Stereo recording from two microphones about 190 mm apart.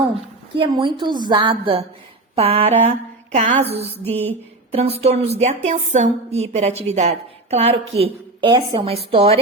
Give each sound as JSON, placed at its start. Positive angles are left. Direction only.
{"t": 0.5, "sound": "a woman's voice", "side_deg": -25}
{"t": 4.0, "sound": "music", "side_deg": 10}
{"t": 4.7, "sound": "a woman's voice", "side_deg": -30}